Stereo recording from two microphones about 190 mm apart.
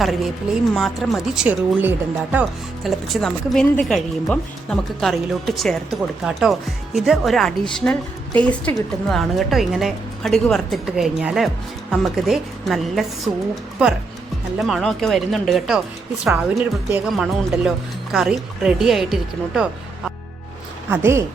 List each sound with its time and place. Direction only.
0.7 s speech: centre (ahead or behind)
20.9 s speech: 15° right (ahead or behind)